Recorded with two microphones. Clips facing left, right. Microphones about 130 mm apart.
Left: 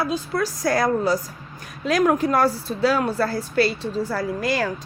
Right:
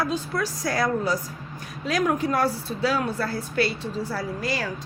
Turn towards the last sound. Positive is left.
turn(degrees=50)  # may be behind; listen again after turning